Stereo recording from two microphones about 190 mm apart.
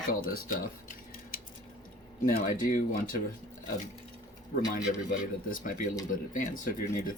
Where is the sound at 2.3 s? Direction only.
45° left (ahead or behind).